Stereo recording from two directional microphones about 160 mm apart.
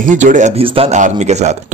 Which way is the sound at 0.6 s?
35° right (ahead or behind).